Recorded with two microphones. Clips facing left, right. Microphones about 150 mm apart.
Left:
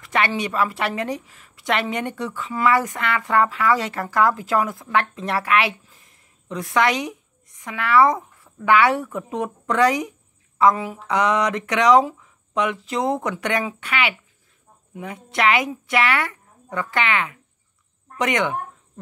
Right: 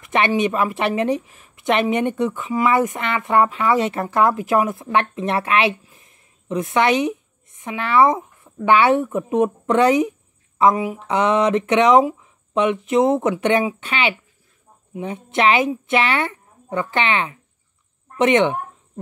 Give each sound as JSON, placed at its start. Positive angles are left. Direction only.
{"t": 0.0, "sound": "a woman's voice", "side_deg": -20}